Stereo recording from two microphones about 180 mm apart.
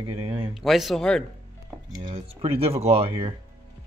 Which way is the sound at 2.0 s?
30° right (ahead or behind).